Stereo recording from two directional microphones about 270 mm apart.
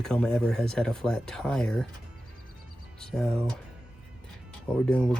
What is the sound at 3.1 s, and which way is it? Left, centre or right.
Speech, centre.